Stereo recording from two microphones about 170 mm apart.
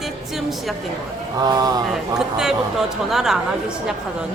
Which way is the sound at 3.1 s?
Centre (ahead or behind).